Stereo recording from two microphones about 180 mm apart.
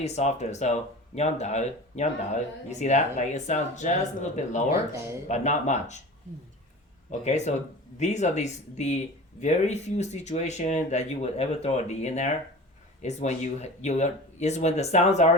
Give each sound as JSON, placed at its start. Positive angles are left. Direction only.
{"t": 0.0, "sound": "speech", "side_deg": 40}
{"t": 7.1, "sound": "speech", "side_deg": 40}